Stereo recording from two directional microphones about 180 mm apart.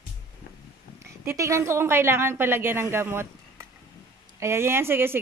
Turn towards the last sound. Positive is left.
turn(degrees=-10)  # may be behind; listen again after turning